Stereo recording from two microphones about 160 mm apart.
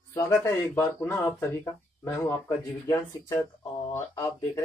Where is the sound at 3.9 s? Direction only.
20° left (ahead or behind).